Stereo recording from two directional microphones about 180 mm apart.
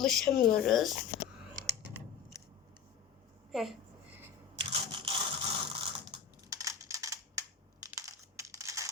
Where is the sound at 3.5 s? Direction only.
Centre (ahead or behind).